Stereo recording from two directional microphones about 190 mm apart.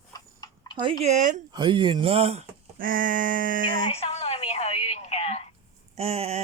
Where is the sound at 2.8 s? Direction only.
45° right (ahead or behind).